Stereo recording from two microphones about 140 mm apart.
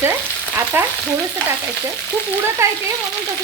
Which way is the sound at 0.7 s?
15° right (ahead or behind).